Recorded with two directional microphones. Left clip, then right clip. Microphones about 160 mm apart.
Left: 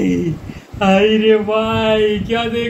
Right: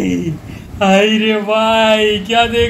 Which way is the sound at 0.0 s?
50° right (ahead or behind).